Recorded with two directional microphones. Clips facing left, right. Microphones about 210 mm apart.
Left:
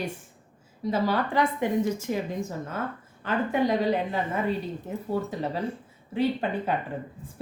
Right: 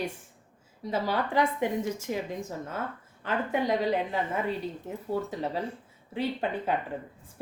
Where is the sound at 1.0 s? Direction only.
20° right (ahead or behind).